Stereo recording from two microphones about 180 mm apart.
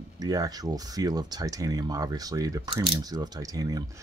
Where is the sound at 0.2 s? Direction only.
20° right (ahead or behind).